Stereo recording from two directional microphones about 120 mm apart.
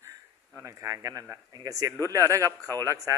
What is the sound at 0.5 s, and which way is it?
Speech, 25° right (ahead or behind).